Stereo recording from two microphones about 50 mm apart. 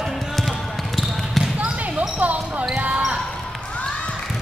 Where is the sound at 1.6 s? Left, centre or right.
Right.